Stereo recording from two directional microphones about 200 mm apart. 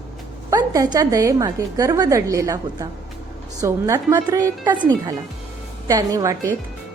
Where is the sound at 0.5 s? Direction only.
20° right (ahead or behind).